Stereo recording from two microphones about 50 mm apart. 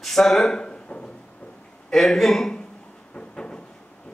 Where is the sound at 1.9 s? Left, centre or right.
Centre.